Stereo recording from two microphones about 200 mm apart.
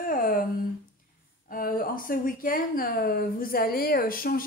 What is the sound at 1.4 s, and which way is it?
Speech, 45° left (ahead or behind).